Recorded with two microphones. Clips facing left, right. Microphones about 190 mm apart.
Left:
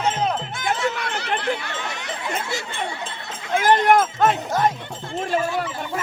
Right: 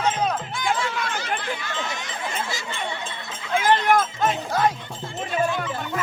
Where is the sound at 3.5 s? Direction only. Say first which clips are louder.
Left 3 dB; 45° left (ahead or behind).